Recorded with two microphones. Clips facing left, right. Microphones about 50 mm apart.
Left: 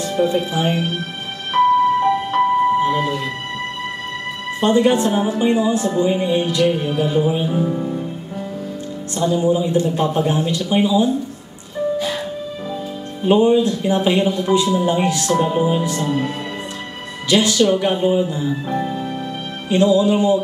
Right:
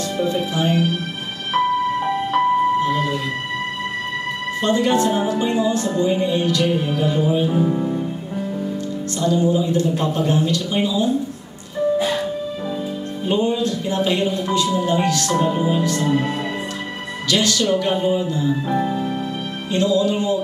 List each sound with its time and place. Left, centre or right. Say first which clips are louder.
0.0 s music: left 3 dB; centre
4.6 s a woman's voice: left 3 dB; centre
6.6 s music: left 2 dB; centre
7.5 s music: right 1 dB; centre
9.2 s a woman's voice: left 1 dB; centre
13.2 s a woman's voice: left 6 dB; centre
16.0 s music: right 1 dB; centre
17.3 s a woman's voice: left 4 dB; centre
18.5 s music: right 2 dB; centre
19.7 s a woman's voice: left 4 dB; centre